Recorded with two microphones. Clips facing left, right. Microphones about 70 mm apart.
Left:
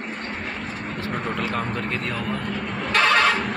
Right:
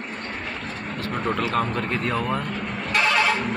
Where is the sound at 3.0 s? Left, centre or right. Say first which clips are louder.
Left 2 dB; left.